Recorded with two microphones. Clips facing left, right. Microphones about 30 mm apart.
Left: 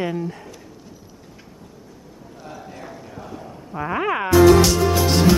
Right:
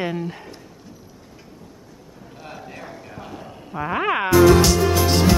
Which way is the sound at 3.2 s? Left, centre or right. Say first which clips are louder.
Left 1 dB; right.